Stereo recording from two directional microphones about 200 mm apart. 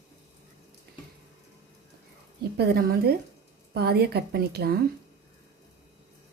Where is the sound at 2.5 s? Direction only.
50° right (ahead or behind).